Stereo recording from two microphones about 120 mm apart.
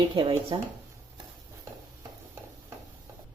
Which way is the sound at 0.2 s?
40° right (ahead or behind).